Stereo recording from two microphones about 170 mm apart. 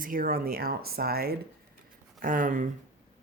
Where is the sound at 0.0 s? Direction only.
55° right (ahead or behind).